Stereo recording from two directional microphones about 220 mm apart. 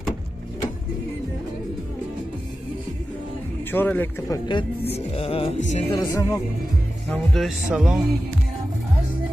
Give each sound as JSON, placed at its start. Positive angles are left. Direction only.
{"t": 3.7, "sound": "speech", "side_deg": 10}
{"t": 4.9, "sound": "music", "side_deg": 25}
{"t": 5.9, "sound": "speech", "side_deg": 15}
{"t": 7.1, "sound": "speech", "side_deg": 5}